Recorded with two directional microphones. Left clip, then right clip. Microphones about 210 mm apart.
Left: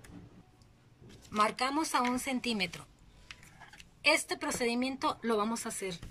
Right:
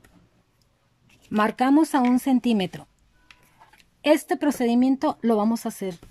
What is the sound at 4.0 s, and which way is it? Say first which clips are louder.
Speech: right 8 dB; 40° right (ahead or behind).